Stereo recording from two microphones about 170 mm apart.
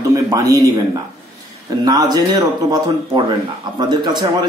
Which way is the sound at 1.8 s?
25° right (ahead or behind).